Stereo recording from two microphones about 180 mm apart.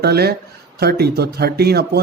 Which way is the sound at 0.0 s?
60° right (ahead or behind).